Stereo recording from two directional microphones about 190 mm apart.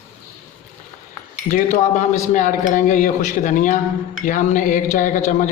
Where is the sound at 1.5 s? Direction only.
45° left (ahead or behind).